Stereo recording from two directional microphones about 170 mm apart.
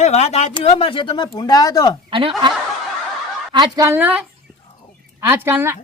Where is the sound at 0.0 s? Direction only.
40° left (ahead or behind); by 2.0 s 20° left (ahead or behind).